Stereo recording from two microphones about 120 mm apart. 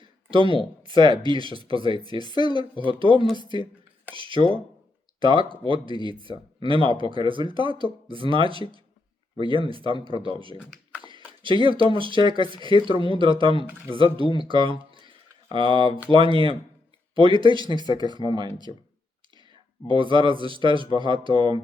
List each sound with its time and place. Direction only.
0.0 s a sound: 45° right (ahead or behind)
1.2 s speech: 45° right (ahead or behind)
2.0 s speech: 35° left (ahead or behind)
2.8 s speech: 45° right (ahead or behind)
3.3 s speech: 40° left (ahead or behind)
4.1 s speech: 45° right (ahead or behind)
11.4 s speech: 45° right (ahead or behind)
19.9 s speech: 45° right (ahead or behind)